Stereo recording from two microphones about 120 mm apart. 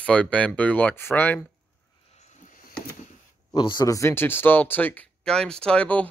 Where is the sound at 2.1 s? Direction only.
75° left (ahead or behind).